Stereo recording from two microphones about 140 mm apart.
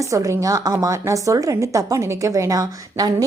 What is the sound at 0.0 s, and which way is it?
A woman's voice, 20° right (ahead or behind).